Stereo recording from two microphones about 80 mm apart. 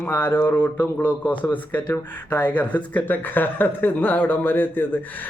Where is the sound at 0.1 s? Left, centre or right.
Left.